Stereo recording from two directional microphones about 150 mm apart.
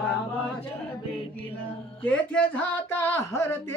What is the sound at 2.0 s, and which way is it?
Speech, 10° left (ahead or behind).